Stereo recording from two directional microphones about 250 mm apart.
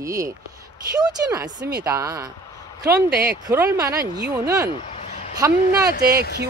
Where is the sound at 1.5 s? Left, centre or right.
Right.